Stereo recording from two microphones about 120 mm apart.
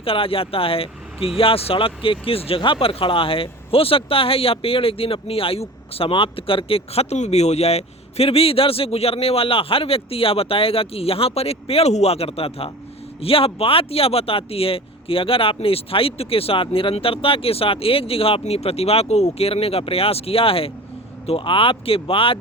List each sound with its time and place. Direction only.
0.0 s speech: 50° left (ahead or behind)